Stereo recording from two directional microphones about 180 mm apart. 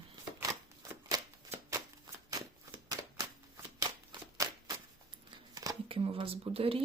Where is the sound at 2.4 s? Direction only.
20° right (ahead or behind).